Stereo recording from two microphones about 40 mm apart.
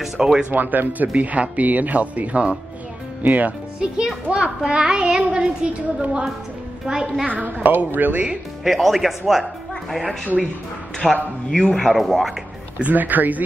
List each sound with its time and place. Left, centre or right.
0.0 s speech: centre
0.5 s speech: right
3.8 s a child's voice: right
7.4 s a woman's voice: right
8.6 s speech: centre
12.8 s a woman's voice: right